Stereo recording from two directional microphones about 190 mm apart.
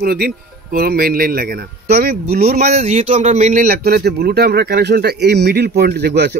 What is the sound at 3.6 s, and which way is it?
Speech, 55° right (ahead or behind).